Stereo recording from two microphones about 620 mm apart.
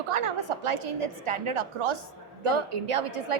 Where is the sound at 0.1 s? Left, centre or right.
Right.